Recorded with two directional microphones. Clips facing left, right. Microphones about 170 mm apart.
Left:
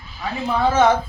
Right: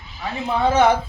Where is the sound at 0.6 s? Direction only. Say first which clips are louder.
Even; 15° right (ahead or behind).